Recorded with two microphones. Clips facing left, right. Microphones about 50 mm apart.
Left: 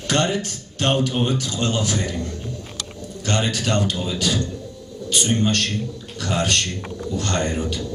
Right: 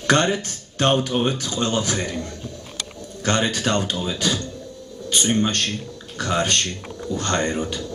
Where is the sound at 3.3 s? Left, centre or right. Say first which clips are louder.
Right 1 dB; right.